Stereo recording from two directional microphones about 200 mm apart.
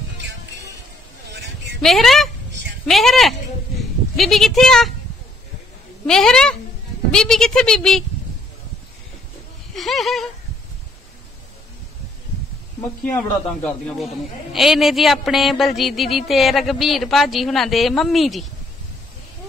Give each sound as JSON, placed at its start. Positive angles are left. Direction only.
{"t": 1.3, "sound": "sheep", "side_deg": -60}
{"t": 1.8, "sound": "a man's voice", "side_deg": 0}
{"t": 6.0, "sound": "a man's voice", "side_deg": 5}
{"t": 9.8, "sound": "a man's voice", "side_deg": 0}
{"t": 13.7, "sound": "a man's voice", "side_deg": 0}